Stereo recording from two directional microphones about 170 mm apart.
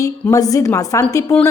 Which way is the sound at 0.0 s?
20° left (ahead or behind).